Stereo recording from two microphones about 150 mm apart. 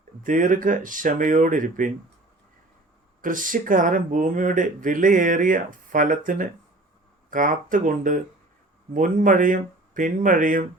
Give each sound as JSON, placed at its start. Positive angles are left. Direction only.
{"t": 0.2, "sound": "speech", "side_deg": -60}
{"t": 3.2, "sound": "speech", "side_deg": -65}